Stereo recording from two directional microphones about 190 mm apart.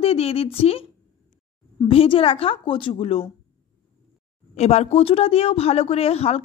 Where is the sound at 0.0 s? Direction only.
30° left (ahead or behind).